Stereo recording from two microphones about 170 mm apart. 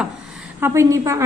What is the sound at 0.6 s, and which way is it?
Speech, 15° right (ahead or behind).